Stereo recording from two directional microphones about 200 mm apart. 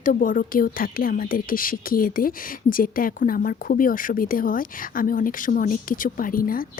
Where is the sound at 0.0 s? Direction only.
45° left (ahead or behind).